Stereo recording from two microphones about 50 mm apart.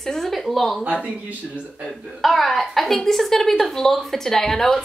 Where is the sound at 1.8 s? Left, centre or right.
Centre.